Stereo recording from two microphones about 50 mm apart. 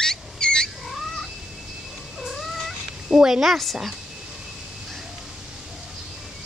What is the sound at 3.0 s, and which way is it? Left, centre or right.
Speech, centre.